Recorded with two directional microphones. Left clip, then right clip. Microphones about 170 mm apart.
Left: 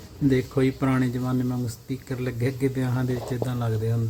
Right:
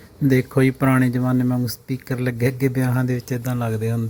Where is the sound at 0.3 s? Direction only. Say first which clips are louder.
Right 4 dB; 35° right (ahead or behind).